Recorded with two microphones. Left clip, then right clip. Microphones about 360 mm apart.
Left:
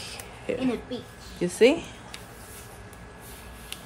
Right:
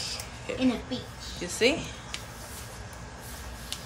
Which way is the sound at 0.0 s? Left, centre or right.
Centre.